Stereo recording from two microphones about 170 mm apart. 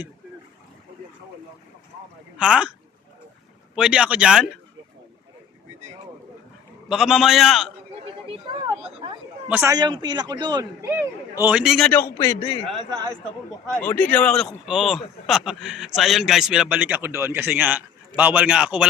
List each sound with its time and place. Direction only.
2.4 s speech: 5° right (ahead or behind)
3.8 s speech: 5° right (ahead or behind)
6.8 s speech: centre (ahead or behind)
8.3 s speech: 30° right (ahead or behind)
9.5 s a man's voice: 10° right (ahead or behind)
9.7 s a man's voice: 25° right (ahead or behind); by 11.9 s 5° right (ahead or behind)
11.9 s speech: 15° left (ahead or behind)
13.7 s a man's voice: 10° left (ahead or behind); by 18.9 s 5° right (ahead or behind)